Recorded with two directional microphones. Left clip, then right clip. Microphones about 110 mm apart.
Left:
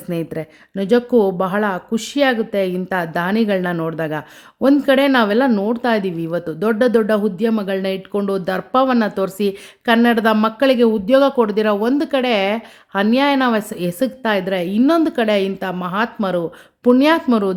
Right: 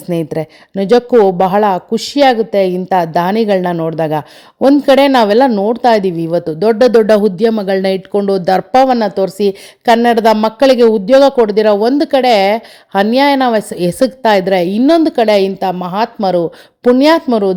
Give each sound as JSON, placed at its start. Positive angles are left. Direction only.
{"t": 0.1, "sound": "speech", "side_deg": -40}
{"t": 5.5, "sound": "a woman's voice", "side_deg": -20}
{"t": 5.7, "sound": "speech", "side_deg": -35}
{"t": 8.1, "sound": "speech", "side_deg": -40}
{"t": 8.9, "sound": "speech", "side_deg": -25}
{"t": 17.3, "sound": "a woman's voice", "side_deg": -15}